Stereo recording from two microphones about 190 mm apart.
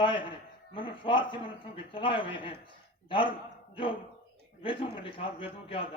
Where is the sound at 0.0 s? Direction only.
25° left (ahead or behind).